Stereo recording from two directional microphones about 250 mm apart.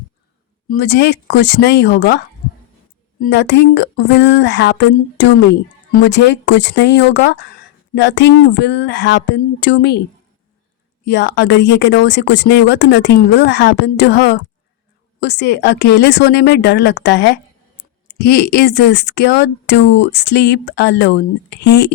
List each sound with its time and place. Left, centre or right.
0.7 s speech: left
11.0 s speech: left